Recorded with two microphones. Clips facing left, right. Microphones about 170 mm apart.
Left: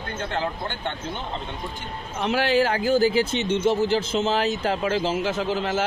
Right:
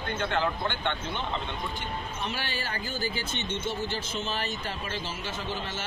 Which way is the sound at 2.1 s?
90° left.